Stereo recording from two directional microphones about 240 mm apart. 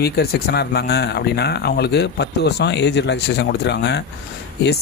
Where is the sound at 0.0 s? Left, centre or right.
Left.